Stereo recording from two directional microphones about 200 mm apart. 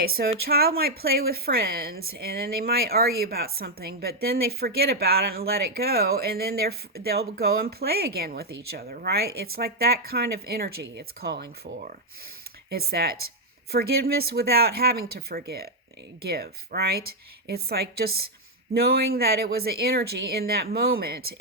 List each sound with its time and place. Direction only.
0.0 s a woman's voice: 50° right (ahead or behind)